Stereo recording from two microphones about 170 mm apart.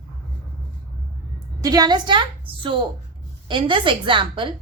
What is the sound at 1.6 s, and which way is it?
A woman's voice, 20° right (ahead or behind).